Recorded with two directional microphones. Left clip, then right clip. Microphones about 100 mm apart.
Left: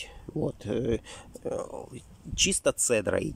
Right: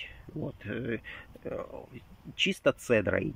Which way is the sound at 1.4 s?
20° left (ahead or behind).